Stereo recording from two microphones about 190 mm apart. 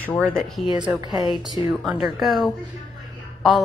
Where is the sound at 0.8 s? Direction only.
25° right (ahead or behind).